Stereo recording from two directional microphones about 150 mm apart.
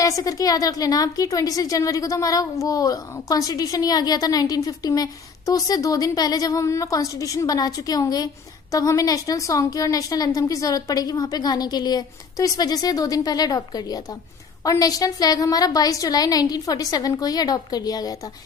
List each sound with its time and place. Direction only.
0.0 s a woman's voice: 20° left (ahead or behind)